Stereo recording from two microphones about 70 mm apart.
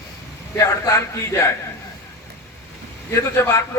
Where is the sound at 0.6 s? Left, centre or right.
Left.